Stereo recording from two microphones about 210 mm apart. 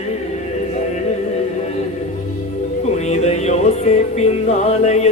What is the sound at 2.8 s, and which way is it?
Music, 30° left (ahead or behind).